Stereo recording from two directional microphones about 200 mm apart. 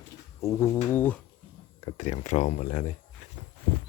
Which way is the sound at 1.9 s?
35° left (ahead or behind).